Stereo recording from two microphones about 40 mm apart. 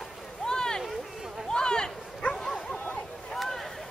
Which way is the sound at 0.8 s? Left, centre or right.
Centre.